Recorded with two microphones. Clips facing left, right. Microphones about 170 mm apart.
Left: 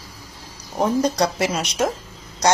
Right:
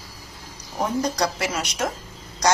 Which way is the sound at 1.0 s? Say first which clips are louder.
Left 4 dB; 25° left (ahead or behind).